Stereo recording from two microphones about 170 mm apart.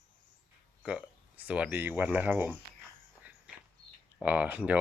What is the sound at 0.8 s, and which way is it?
Speech, 5° right (ahead or behind).